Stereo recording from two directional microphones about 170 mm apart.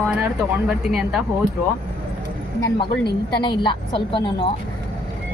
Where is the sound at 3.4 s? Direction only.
30° left (ahead or behind).